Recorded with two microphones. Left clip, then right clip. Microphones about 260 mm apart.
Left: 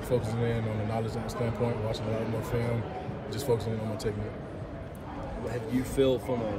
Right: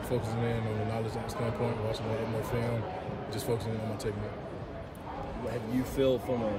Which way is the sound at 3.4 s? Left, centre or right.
Centre.